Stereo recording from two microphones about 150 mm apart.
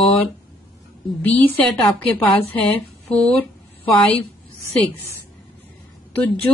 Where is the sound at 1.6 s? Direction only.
10° left (ahead or behind).